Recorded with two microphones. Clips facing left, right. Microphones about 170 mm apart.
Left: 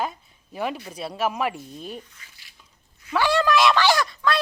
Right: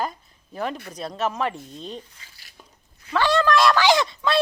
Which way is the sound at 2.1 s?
30° right (ahead or behind).